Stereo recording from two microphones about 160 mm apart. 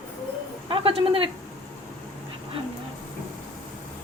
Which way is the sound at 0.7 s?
35° right (ahead or behind).